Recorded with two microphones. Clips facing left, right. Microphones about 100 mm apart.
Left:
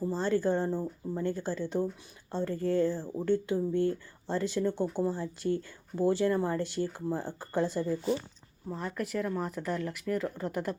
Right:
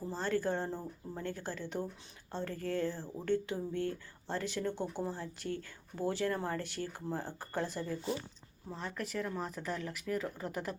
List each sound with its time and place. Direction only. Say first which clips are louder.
0.1 s speech: left 4 dB; 15° left (ahead or behind)
8.7 s speech: left 5 dB; 5° left (ahead or behind)